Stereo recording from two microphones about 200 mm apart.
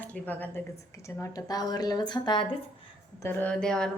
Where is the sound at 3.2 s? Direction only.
10° left (ahead or behind).